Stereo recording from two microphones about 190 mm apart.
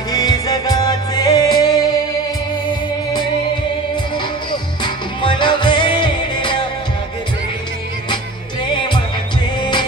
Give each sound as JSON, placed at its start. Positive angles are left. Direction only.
{"t": 0.1, "sound": "music", "side_deg": 20}
{"t": 4.5, "sound": "music", "side_deg": 25}
{"t": 8.6, "sound": "music", "side_deg": 25}